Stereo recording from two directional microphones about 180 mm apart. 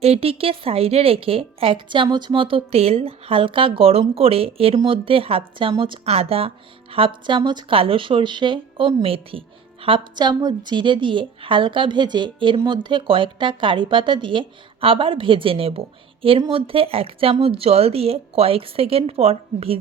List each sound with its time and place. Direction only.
0.0 s a woman's voice: 35° right (ahead or behind)